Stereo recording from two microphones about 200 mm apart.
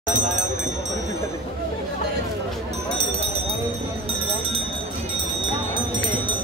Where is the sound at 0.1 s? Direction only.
40° right (ahead or behind).